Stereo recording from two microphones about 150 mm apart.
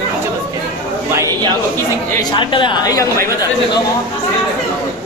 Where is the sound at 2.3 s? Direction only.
35° left (ahead or behind).